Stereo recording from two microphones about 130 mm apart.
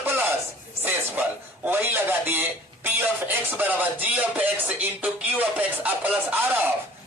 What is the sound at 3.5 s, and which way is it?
Music, 15° right (ahead or behind).